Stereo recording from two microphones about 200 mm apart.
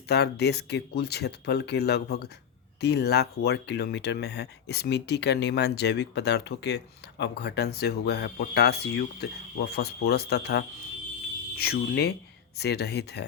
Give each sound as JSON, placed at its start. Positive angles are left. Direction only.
{"t": 0.1, "sound": "speech", "side_deg": 55}